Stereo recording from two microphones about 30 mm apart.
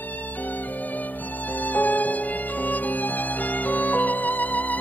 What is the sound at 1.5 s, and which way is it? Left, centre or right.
Music, left.